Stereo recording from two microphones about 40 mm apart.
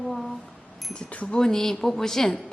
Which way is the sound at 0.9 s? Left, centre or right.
Left.